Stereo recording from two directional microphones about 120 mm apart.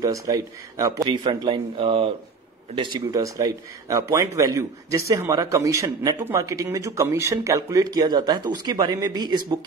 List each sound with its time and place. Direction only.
0.0 s a man's voice: 30° right (ahead or behind)
1.0 s speech: 40° right (ahead or behind)
3.1 s a man's voice: 30° right (ahead or behind)